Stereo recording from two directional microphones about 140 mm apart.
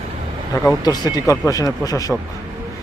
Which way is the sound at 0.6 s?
25° left (ahead or behind).